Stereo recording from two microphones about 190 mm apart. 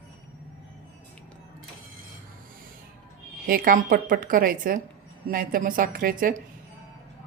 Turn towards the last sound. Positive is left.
turn(degrees=-45)  # may be behind; listen again after turning